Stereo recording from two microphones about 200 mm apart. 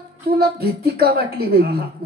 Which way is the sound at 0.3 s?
50° right (ahead or behind).